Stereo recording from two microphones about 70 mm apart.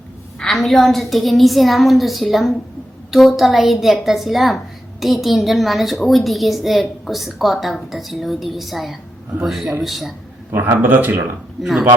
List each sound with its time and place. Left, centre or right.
0.3 s a woman's voice: centre
10.5 s a man's voice: right
11.6 s a woman's voice: centre